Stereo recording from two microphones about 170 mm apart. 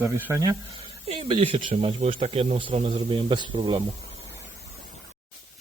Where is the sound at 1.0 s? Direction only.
35° right (ahead or behind).